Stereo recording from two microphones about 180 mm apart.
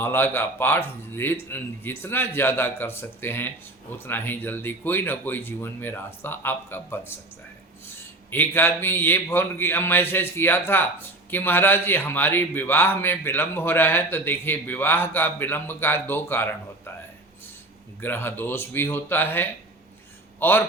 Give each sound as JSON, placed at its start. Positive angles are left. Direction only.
{"t": 0.0, "sound": "a man's voice", "side_deg": 10}
{"t": 8.3, "sound": "a man's voice", "side_deg": 10}
{"t": 18.0, "sound": "a man's voice", "side_deg": 10}